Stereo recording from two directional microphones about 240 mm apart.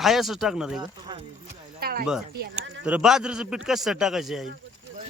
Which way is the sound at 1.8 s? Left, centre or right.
Right.